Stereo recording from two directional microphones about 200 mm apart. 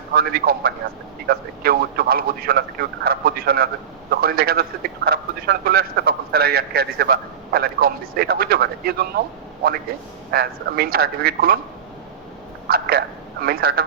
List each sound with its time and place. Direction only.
0.1 s a man's voice: 50° right (ahead or behind)
10.3 s a man's voice: 50° right (ahead or behind)
12.6 s speech: 50° right (ahead or behind)